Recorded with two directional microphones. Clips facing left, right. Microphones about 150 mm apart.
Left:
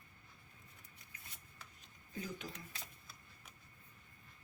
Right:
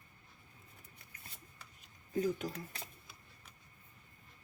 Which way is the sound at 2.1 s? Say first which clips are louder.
Right 11 dB; 45° right (ahead or behind).